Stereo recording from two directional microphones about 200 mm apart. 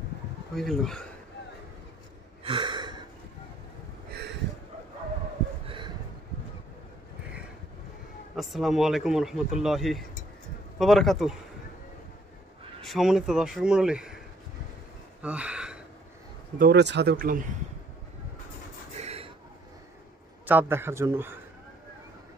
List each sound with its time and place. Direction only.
0.6 s speech: centre (ahead or behind)
2.4 s gasp: 25° right (ahead or behind)
5.7 s a sound: 25° right (ahead or behind)
8.4 s speech: centre (ahead or behind)
12.8 s speech: centre (ahead or behind)
15.2 s gasp: 5° right (ahead or behind)
16.5 s speech: 55° right (ahead or behind)
18.9 s a sound: 30° right (ahead or behind)
20.4 s a man's voice: 10° right (ahead or behind)